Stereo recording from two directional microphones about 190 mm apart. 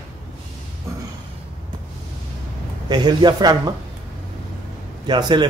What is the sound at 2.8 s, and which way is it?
Speech, 20° right (ahead or behind).